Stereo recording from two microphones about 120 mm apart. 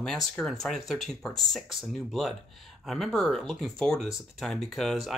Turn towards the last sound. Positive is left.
turn(degrees=0)  # may be behind; listen again after turning